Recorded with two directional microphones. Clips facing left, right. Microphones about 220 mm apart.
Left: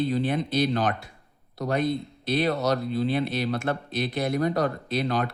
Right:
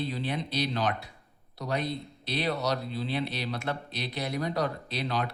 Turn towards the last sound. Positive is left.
turn(degrees=50)  # may be behind; listen again after turning